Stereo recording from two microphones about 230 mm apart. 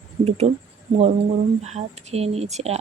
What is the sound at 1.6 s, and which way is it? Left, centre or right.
Speech, right.